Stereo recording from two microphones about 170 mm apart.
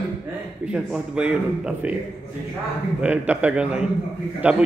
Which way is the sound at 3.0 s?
10° right (ahead or behind).